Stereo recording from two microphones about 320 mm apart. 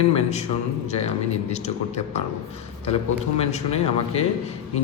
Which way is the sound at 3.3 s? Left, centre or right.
Centre.